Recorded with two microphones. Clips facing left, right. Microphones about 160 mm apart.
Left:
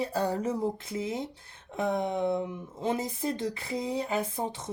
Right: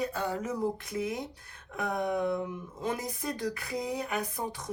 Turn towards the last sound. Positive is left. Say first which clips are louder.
# left 2 dB
turn(degrees=25)  # may be behind; listen again after turning